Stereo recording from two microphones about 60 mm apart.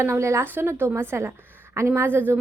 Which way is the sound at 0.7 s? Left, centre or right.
Right.